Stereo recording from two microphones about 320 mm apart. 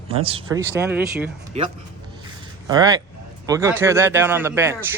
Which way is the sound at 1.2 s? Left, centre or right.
Centre.